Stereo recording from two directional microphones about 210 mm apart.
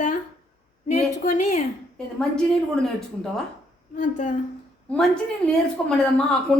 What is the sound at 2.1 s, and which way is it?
Speech, 5° left (ahead or behind).